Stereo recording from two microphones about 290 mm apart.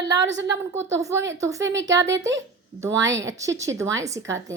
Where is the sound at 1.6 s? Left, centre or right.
Right.